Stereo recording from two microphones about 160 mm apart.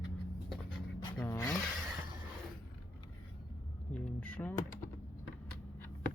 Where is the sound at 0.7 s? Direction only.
30° left (ahead or behind).